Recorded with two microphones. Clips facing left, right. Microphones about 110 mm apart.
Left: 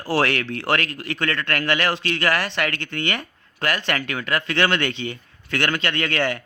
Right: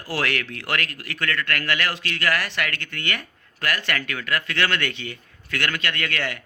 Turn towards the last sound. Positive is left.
turn(degrees=30)  # may be behind; listen again after turning